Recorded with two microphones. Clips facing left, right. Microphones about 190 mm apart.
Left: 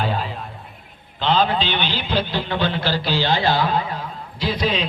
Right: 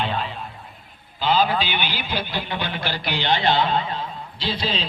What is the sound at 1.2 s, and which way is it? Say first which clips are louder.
A man's voice: left 1 dB; 5° right (ahead or behind).